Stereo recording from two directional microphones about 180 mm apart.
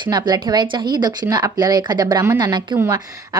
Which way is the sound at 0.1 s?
20° right (ahead or behind).